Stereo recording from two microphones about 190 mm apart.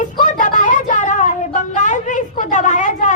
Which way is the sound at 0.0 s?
40° left (ahead or behind).